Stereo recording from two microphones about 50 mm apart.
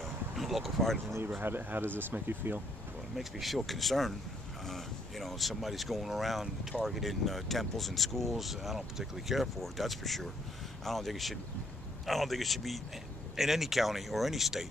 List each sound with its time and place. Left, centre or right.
0.0 s a sound: centre
1.4 s speech: right
3.2 s speech: centre